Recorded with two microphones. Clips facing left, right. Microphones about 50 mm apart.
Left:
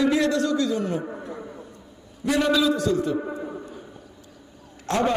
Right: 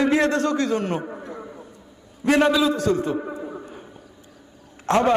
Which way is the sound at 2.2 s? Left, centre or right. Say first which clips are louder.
Right 3 dB; right.